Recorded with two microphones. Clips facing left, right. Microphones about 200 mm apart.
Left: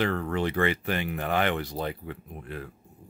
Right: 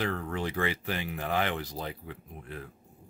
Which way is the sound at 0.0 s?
70° left (ahead or behind).